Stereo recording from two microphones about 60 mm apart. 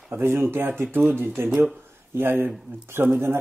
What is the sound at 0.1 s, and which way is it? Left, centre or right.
Speech, right.